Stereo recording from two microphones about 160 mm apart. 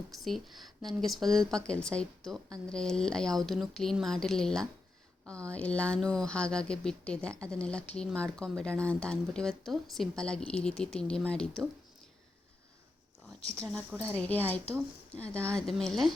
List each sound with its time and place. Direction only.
0.1 s speech: centre (ahead or behind)
13.2 s speech: 5° left (ahead or behind)
13.9 s speech: 15° right (ahead or behind)
14.2 s speech: 10° left (ahead or behind)